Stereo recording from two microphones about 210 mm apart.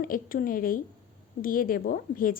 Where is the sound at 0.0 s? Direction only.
40° left (ahead or behind).